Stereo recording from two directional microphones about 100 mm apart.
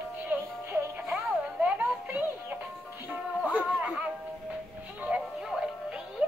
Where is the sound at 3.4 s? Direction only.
15° right (ahead or behind).